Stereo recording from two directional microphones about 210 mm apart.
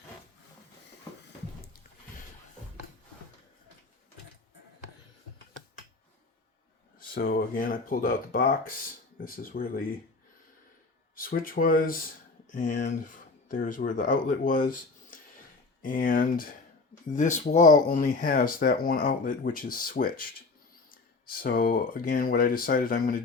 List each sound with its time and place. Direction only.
7.1 s speech: 45° left (ahead or behind)
11.1 s speech: 45° left (ahead or behind)
21.2 s speech: 45° left (ahead or behind)